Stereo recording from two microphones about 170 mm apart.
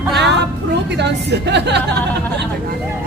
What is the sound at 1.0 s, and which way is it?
Speech, 85° right.